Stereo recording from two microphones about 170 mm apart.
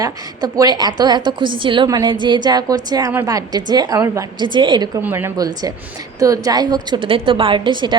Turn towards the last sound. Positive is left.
turn(degrees=-25)  # may be behind; listen again after turning